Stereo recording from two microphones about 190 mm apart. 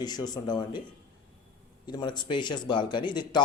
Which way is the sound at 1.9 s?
25° left (ahead or behind).